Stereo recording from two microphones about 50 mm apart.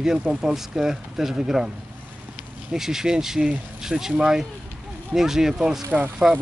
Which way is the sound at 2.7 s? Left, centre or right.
Centre.